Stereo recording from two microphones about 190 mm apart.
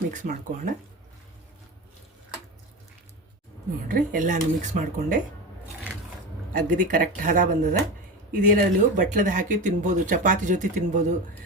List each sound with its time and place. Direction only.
0.1 s speech: 45° right (ahead or behind)
3.8 s speech: 45° right (ahead or behind)
6.5 s speech: 45° right (ahead or behind)